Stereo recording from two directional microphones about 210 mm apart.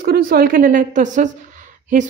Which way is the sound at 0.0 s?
45° right (ahead or behind).